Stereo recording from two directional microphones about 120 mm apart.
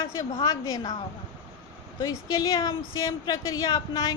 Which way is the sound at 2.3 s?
35° left (ahead or behind).